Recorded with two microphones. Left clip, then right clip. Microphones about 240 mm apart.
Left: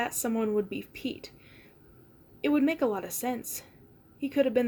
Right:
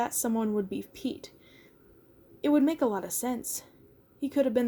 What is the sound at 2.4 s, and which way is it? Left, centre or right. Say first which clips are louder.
Speech: right 1 dB; right.